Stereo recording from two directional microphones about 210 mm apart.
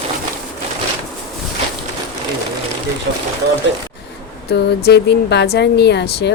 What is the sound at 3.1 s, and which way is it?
Speech, 50° right (ahead or behind).